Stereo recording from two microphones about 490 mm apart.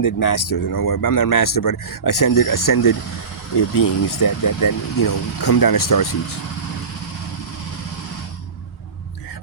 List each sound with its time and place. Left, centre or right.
0.0 s speech: left